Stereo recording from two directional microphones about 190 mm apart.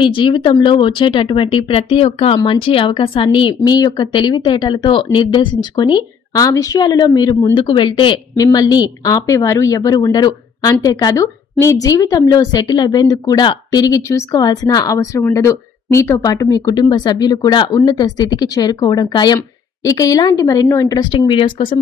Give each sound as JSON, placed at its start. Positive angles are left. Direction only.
{"t": 0.0, "sound": "speech", "side_deg": 25}